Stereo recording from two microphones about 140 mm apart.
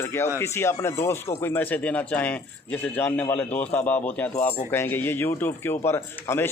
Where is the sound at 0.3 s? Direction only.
20° left (ahead or behind).